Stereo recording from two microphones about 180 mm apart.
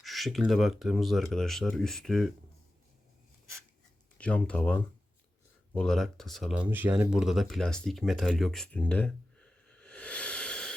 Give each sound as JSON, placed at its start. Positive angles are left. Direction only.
{"t": 0.0, "sound": "speech", "side_deg": 0}
{"t": 4.2, "sound": "speech", "side_deg": 5}